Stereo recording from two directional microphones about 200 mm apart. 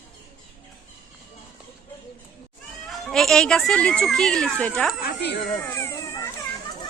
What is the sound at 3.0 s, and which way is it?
Speech, centre (ahead or behind).